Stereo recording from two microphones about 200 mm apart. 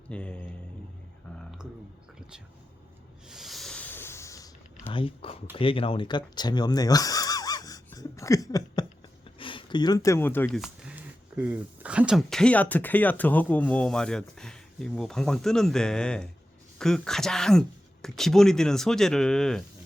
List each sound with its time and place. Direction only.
0.1 s speech: 5° left (ahead or behind)
3.2 s a sound: centre (ahead or behind); by 5.4 s 25° left (ahead or behind)
5.5 s speech: 25° left (ahead or behind); by 10.6 s 10° left (ahead or behind)
10.6 s speech: 5° right (ahead or behind)